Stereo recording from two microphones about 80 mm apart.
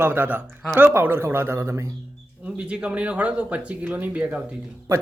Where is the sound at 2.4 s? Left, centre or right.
Centre.